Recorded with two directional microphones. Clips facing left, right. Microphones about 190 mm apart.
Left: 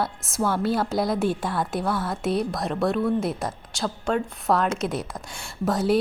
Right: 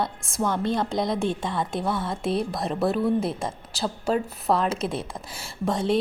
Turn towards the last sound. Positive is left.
turn(degrees=5)  # may be behind; listen again after turning